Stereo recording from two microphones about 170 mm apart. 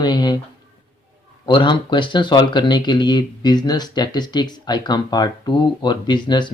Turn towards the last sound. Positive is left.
turn(degrees=25)  # may be behind; listen again after turning